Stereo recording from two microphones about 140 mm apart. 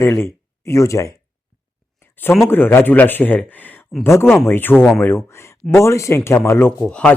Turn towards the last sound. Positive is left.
turn(degrees=5)  # may be behind; listen again after turning